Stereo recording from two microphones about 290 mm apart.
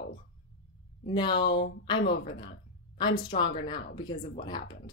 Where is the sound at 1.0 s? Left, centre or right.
Centre.